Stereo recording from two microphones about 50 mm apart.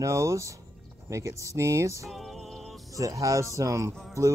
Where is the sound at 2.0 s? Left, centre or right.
Centre.